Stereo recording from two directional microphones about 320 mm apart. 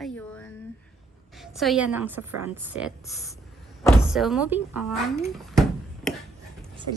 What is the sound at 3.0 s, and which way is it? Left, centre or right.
Speech, centre.